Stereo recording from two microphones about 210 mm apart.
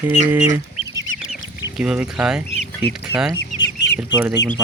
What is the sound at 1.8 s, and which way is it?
Speech, 5° right (ahead or behind).